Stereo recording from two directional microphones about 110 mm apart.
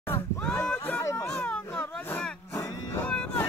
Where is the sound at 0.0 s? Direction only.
15° left (ahead or behind).